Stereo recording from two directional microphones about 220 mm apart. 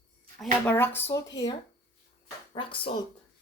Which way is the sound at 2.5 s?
25° left (ahead or behind).